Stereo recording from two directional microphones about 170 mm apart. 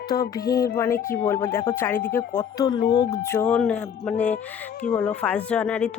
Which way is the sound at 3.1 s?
15° left (ahead or behind).